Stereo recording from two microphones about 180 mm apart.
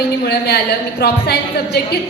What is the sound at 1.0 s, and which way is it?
Speech, 65° left (ahead or behind).